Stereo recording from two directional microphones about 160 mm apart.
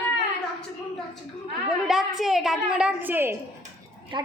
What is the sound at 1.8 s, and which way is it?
A woman's voice, centre (ahead or behind).